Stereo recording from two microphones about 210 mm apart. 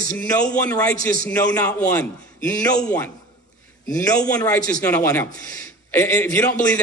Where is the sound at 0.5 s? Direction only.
5° left (ahead or behind).